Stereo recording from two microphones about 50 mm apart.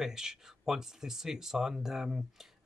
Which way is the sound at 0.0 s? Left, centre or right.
Centre.